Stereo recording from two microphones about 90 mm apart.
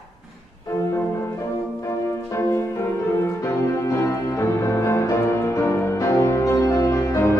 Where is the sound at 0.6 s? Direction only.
30° left (ahead or behind).